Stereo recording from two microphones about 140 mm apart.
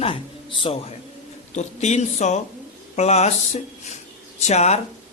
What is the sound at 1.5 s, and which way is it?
Speech, 55° left (ahead or behind).